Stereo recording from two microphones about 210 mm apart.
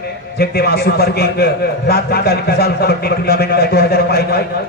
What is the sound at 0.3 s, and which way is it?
A man's voice, 50° left (ahead or behind).